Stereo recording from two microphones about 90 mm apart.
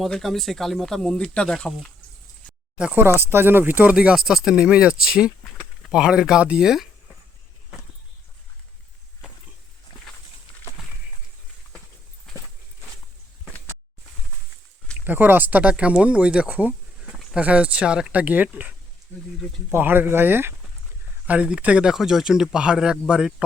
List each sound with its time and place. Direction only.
0.0 s speech: 5° left (ahead or behind)
2.7 s speech: 10° right (ahead or behind)
3.0 s speech: 25° right (ahead or behind); by 6.8 s 5° right (ahead or behind)
9.2 s a sound: 10° right (ahead or behind)
15.0 s speech: 20° right (ahead or behind)
19.7 s speech: 25° right (ahead or behind)
21.2 s speech: 15° right (ahead or behind)